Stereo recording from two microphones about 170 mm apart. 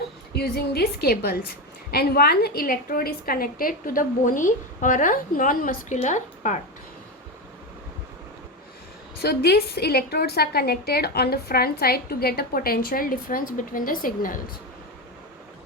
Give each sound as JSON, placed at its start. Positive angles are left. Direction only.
{"t": 0.3, "sound": "a woman's voice", "side_deg": 70}
{"t": 9.2, "sound": "a woman's voice", "side_deg": 70}